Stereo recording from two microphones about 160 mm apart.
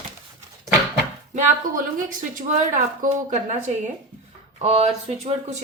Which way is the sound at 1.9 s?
55° right (ahead or behind).